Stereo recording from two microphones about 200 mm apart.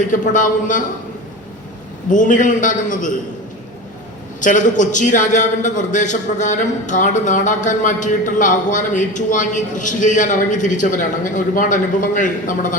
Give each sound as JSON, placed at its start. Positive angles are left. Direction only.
{"t": 0.0, "sound": "a man's voice", "side_deg": 40}
{"t": 2.0, "sound": "a man's voice", "side_deg": 40}
{"t": 4.4, "sound": "a man's voice", "side_deg": 40}